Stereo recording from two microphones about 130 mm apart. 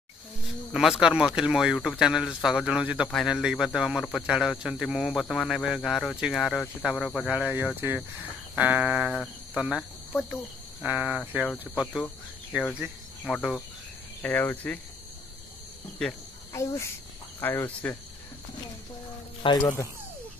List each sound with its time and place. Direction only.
0.7 s speech: 5° right (ahead or behind)
3.1 s speech: centre (ahead or behind)
7.2 s speech: 10° right (ahead or behind)
9.1 s cricket: 5° left (ahead or behind)
10.8 s speech: 10° right (ahead or behind)
12.8 s cricket: centre (ahead or behind)
14.2 s cricket: 15° left (ahead or behind)
16.0 s cricket: 5° left (ahead or behind)
16.5 s speech: 20° left (ahead or behind)
17.4 s cricket: 15° left (ahead or behind)
19.4 s speech: 30° left (ahead or behind)